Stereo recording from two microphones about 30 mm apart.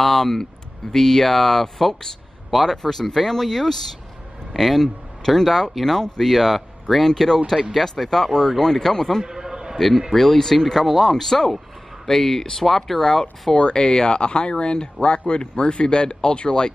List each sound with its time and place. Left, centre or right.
0.0 s speech: centre
9.2 s a sound: centre
9.8 s speech: centre
11.2 s speech: centre
13.1 s speech: centre